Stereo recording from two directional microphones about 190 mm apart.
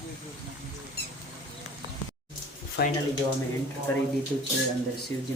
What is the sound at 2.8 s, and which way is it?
Speech, 60° left (ahead or behind).